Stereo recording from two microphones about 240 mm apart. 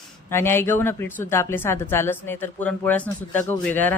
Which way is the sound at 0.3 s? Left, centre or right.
Centre.